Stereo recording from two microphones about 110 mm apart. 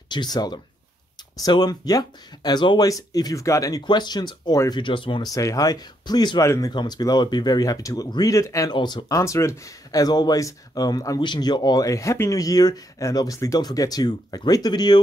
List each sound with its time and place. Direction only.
0.1 s speech: 40° left (ahead or behind)
3.8 s speech: 40° left (ahead or behind)
5.2 s speech: 30° left (ahead or behind)
6.4 s speech: 30° left (ahead or behind)
6.7 s speech: 40° left (ahead or behind)
8.6 s speech: 40° left (ahead or behind)
9.2 s speech: 25° left (ahead or behind)